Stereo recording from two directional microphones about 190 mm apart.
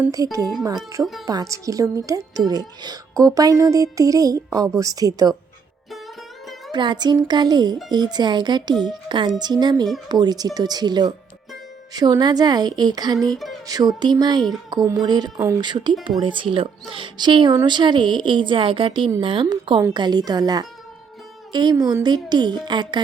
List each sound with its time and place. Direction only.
0.0 s speech: 20° right (ahead or behind)
6.7 s a woman's voice: 25° right (ahead or behind)
13.3 s music: centre (ahead or behind)
13.7 s speech: 20° right (ahead or behind)